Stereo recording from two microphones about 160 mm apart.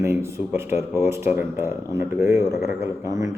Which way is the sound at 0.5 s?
15° right (ahead or behind).